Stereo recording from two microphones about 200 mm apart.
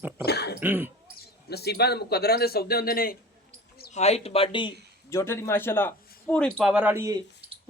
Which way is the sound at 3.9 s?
30° left (ahead or behind).